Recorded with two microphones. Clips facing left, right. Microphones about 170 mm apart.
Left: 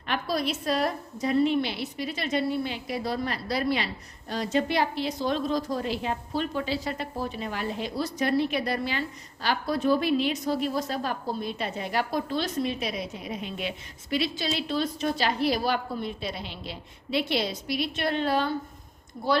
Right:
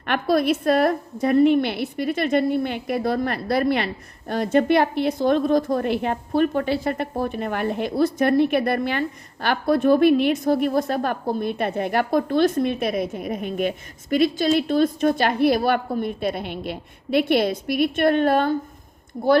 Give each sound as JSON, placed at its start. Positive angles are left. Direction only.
{"t": 0.0, "sound": "a woman's voice", "side_deg": -60}
{"t": 19.1, "sound": "a woman's voice", "side_deg": -45}